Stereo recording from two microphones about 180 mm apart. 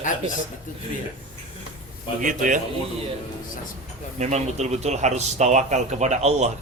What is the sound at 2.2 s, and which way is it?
Speech, 45° right (ahead or behind).